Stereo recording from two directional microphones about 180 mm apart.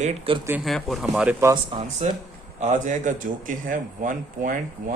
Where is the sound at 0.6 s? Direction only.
Centre (ahead or behind).